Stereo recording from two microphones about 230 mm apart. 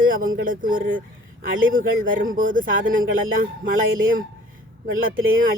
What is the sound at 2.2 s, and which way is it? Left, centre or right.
Speech, right.